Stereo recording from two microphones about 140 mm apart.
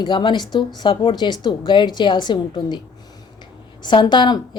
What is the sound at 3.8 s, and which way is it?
Speech, 35° left (ahead or behind).